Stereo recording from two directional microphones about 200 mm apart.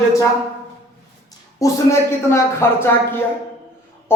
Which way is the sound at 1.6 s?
15° left (ahead or behind).